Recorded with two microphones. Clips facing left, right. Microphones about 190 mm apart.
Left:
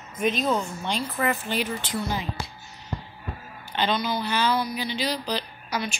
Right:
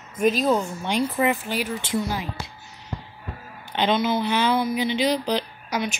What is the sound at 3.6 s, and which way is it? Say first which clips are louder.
Speech: right 4 dB; 20° right (ahead or behind).